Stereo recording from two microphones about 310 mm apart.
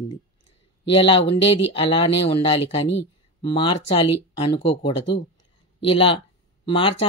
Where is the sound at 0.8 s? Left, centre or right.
Centre.